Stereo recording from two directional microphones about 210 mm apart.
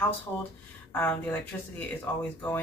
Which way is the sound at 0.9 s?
10° left (ahead or behind).